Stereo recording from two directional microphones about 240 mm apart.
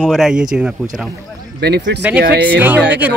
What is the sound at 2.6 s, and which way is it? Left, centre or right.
Speech, centre.